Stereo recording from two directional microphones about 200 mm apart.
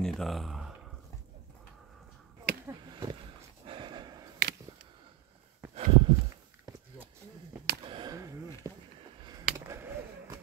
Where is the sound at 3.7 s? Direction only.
25° right (ahead or behind).